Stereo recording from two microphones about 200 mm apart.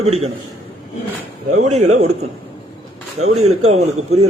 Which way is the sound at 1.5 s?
35° right (ahead or behind).